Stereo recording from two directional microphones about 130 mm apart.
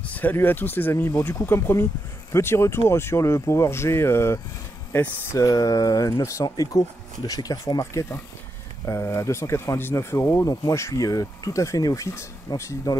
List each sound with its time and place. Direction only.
0.0 s speech: 10° left (ahead or behind)